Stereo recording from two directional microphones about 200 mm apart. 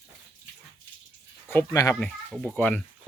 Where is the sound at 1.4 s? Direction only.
15° left (ahead or behind).